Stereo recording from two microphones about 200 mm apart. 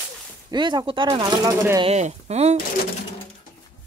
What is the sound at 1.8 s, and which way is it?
Speech, 30° right (ahead or behind).